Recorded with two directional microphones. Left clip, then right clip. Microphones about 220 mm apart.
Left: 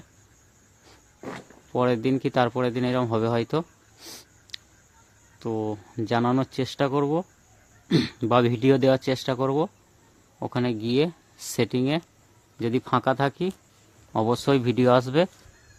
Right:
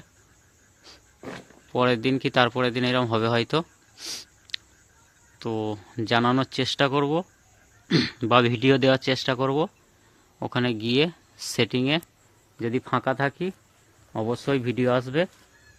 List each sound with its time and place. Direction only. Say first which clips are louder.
1.7 s speech: right 1 dB; 5° left (ahead or behind)